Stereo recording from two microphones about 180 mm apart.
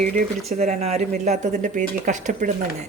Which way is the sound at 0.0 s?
50° right (ahead or behind).